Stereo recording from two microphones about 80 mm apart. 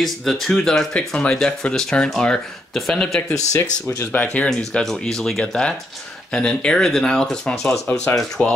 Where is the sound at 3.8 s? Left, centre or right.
Left.